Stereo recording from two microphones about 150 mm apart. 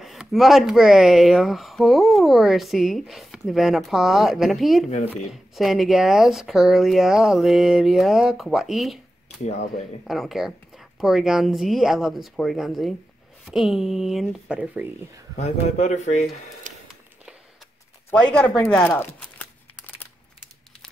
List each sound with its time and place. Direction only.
0.0 s speech: centre (ahead or behind)
4.8 s speech: 45° left (ahead or behind)
5.3 s speech: centre (ahead or behind)
9.4 s speech: 45° left (ahead or behind)
10.0 s speech: centre (ahead or behind)
15.3 s speech: 50° left (ahead or behind)
16.6 s a sound: 55° right (ahead or behind)
18.1 s speech: 5° left (ahead or behind)